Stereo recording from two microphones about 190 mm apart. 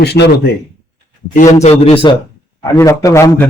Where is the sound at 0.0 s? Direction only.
60° left (ahead or behind).